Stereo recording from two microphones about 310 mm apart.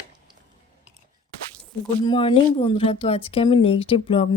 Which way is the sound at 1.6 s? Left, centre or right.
Centre.